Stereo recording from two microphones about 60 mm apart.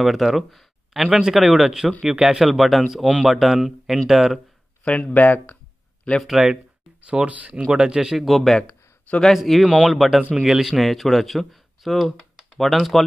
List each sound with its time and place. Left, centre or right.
0.0 s speech: centre
1.0 s speech: centre
4.8 s speech: centre
6.4 s speech: centre
7.6 s speech: centre